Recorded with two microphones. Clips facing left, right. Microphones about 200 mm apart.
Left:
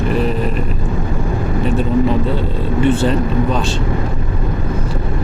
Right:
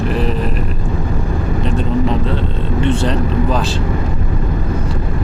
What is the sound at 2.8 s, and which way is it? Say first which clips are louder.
Speech: left 2 dB; 5° left (ahead or behind).